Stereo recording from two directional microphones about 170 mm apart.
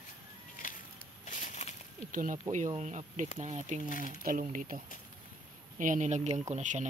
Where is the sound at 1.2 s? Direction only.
45° left (ahead or behind).